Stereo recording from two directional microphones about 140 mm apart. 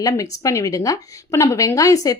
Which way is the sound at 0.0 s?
25° left (ahead or behind).